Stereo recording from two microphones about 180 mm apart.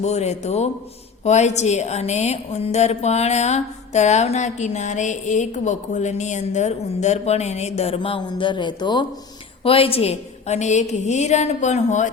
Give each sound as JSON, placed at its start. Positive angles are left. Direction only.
{"t": 0.0, "sound": "a woman's voice", "side_deg": 40}